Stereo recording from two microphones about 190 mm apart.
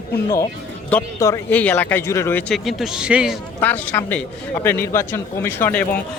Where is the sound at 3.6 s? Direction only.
10° left (ahead or behind).